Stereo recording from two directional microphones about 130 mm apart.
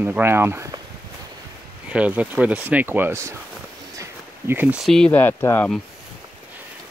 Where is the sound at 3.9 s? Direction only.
20° right (ahead or behind).